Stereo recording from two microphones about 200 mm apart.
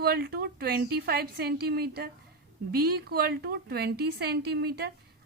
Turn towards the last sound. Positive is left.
turn(degrees=-50)  # may be behind; listen again after turning